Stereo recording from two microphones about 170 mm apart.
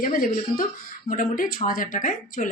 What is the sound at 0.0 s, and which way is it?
A woman's voice, 55° left (ahead or behind).